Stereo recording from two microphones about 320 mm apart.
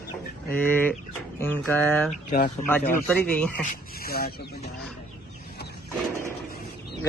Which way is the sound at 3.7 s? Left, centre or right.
Left.